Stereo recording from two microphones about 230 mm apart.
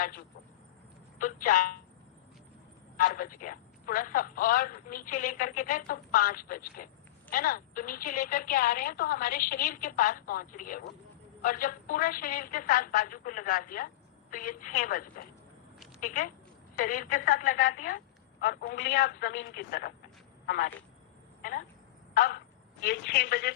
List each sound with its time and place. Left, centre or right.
1.2 s a woman's voice: left
3.0 s a woman's voice: left
22.1 s speech: left